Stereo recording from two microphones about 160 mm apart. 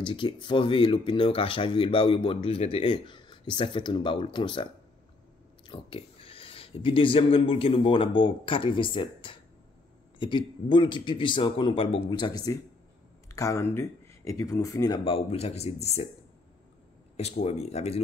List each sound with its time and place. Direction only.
0.1 s speech: 30° left (ahead or behind)
5.7 s speech: 35° left (ahead or behind)
15.0 s speech: 40° left (ahead or behind)
17.2 s speech: 40° left (ahead or behind)